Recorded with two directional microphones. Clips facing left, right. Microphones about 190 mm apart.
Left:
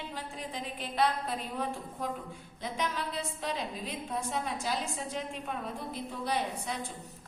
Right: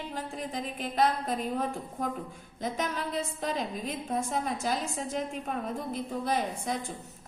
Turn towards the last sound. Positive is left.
turn(degrees=-45)  # may be behind; listen again after turning